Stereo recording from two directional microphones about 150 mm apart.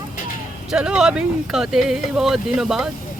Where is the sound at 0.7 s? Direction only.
5° right (ahead or behind).